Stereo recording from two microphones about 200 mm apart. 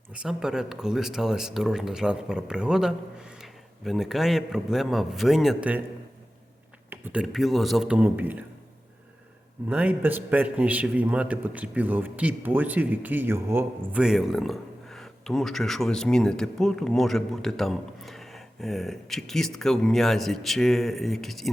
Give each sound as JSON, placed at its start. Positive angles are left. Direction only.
{"t": 0.1, "sound": "a man's voice", "side_deg": -5}
{"t": 6.9, "sound": "speech", "side_deg": -10}
{"t": 9.6, "sound": "a man's voice", "side_deg": -5}